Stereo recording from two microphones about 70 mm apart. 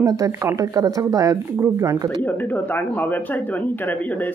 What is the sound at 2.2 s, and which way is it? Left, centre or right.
Speech, left.